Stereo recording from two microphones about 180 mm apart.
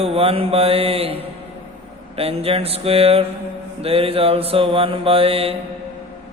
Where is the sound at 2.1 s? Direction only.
30° right (ahead or behind).